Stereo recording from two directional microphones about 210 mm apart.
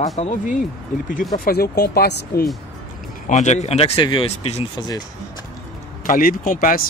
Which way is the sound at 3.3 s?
35° left (ahead or behind).